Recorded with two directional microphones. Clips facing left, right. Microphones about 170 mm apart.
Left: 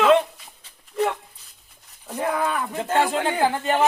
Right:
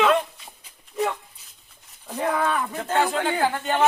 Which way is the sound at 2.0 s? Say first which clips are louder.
Even; 5° left (ahead or behind).